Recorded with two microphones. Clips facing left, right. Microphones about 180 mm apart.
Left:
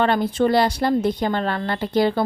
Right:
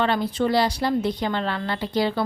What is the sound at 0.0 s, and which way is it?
A woman's voice, 50° left (ahead or behind).